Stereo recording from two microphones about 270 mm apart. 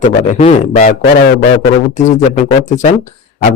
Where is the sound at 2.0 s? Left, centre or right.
Left.